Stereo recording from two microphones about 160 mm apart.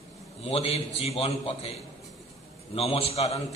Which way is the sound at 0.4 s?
40° left (ahead or behind).